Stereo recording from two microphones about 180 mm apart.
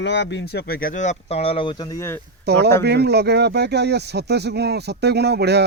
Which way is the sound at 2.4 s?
65° right (ahead or behind).